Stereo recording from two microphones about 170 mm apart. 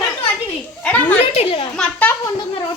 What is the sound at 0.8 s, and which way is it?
Speech, 10° left (ahead or behind).